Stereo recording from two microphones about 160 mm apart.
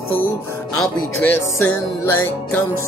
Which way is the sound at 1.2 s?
15° left (ahead or behind).